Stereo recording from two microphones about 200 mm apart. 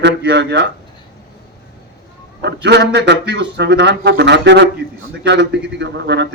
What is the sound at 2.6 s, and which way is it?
Speech, 60° right (ahead or behind).